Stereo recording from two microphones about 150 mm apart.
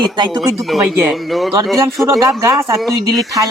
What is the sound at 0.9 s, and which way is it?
Speech, 15° right (ahead or behind).